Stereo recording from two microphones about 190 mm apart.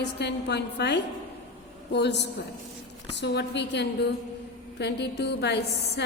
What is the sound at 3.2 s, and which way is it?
A woman's voice, 65° left (ahead or behind).